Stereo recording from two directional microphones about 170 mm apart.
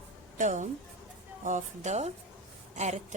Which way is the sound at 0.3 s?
45° right (ahead or behind).